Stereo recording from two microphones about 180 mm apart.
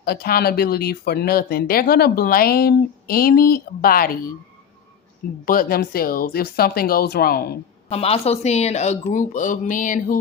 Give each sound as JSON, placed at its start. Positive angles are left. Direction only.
{"t": 0.0, "sound": "speech", "side_deg": 60}
{"t": 5.5, "sound": "speech", "side_deg": 55}
{"t": 7.9, "sound": "speech", "side_deg": 35}